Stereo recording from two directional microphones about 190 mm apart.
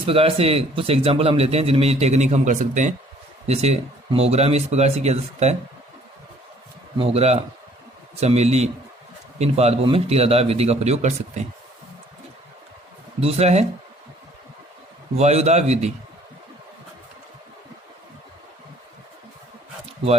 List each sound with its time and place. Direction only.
0.0 s a man's voice: 30° right (ahead or behind)
7.0 s a man's voice: 35° right (ahead or behind)
13.1 s a man's voice: 30° right (ahead or behind)
15.2 s a man's voice: 35° right (ahead or behind)